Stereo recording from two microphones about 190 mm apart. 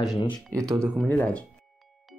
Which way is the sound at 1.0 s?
10° left (ahead or behind).